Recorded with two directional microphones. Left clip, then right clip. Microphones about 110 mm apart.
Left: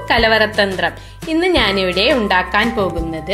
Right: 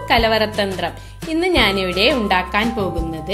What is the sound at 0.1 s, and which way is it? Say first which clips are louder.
A woman's voice: left 3 dB; 25° right (ahead or behind).